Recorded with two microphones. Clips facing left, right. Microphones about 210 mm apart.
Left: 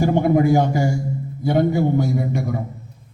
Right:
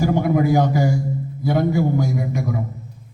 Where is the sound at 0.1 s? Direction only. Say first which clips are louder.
Left 2 dB; 30° left (ahead or behind).